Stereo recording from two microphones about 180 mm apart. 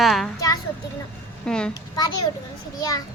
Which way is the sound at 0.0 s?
Centre (ahead or behind).